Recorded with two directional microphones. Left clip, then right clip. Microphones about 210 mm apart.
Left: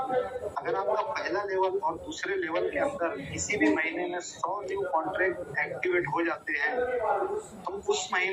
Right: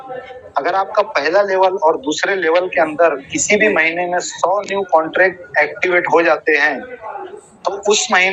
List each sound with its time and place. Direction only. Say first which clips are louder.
0.5 s a man's voice: right 14 dB; 40° right (ahead or behind)
8.1 s speech: right 16 dB; 45° right (ahead or behind)